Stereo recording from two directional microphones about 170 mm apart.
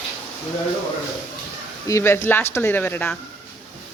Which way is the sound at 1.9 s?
15° left (ahead or behind).